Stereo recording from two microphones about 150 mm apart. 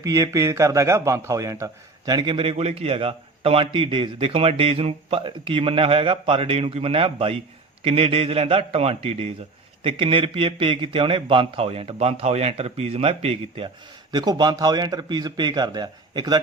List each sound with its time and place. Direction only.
0.0 s a man's voice: 20° right (ahead or behind); by 13.7 s 40° right (ahead or behind)
14.1 s speech: 30° right (ahead or behind)